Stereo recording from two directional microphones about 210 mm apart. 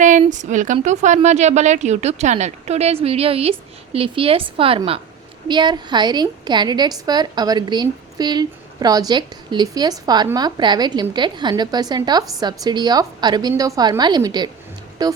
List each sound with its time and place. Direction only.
0.0 s a woman's voice: 35° right (ahead or behind); by 15.1 s 20° right (ahead or behind)